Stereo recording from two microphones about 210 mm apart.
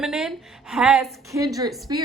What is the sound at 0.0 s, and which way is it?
A woman's voice, centre (ahead or behind).